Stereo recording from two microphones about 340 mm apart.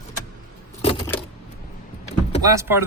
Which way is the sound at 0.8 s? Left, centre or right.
Centre.